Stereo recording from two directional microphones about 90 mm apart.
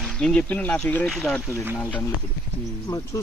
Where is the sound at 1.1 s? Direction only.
Centre (ahead or behind).